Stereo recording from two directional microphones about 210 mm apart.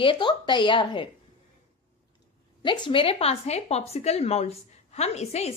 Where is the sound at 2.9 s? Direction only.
25° left (ahead or behind).